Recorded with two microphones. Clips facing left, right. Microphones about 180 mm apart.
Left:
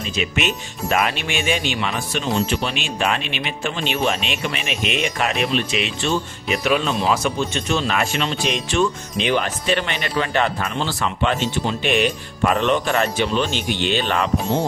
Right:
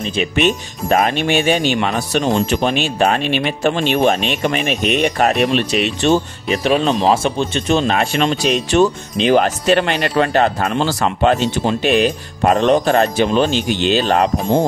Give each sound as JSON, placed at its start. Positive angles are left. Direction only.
{"t": 0.8, "sound": "speech", "side_deg": -40}
{"t": 7.1, "sound": "speech", "side_deg": -30}